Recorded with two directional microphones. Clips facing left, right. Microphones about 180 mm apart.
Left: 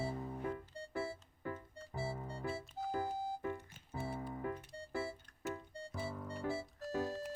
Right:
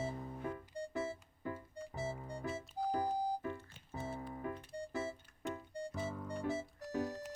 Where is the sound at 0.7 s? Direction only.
15° right (ahead or behind).